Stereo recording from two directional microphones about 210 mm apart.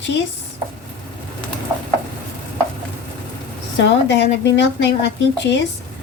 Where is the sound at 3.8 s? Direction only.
55° left (ahead or behind).